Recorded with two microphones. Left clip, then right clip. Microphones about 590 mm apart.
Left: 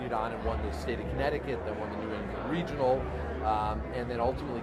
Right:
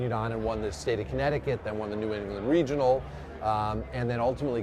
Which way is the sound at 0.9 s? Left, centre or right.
Right.